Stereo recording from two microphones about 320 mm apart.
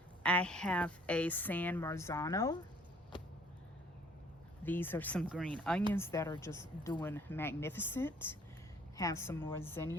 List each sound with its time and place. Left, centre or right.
0.2 s a woman's voice: centre
4.6 s a woman's voice: centre